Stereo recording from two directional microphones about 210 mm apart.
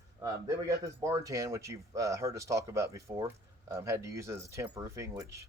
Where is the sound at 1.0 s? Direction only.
15° right (ahead or behind).